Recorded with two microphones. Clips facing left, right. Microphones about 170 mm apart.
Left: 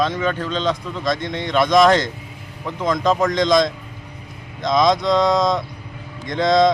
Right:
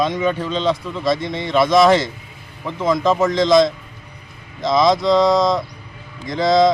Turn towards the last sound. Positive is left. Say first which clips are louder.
# right 1 dB
turn(degrees=0)  # may be behind; listen again after turning